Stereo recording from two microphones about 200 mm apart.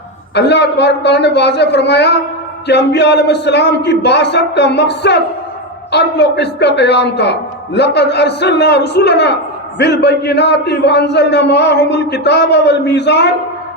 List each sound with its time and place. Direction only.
0.3 s a man's voice: 60° left (ahead or behind)